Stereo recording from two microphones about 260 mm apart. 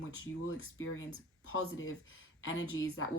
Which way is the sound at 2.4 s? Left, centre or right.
Left.